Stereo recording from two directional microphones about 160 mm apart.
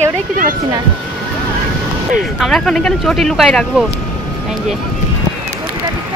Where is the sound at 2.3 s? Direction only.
Centre (ahead or behind).